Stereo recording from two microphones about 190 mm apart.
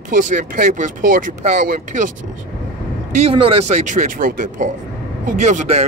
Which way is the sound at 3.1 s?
35° right (ahead or behind).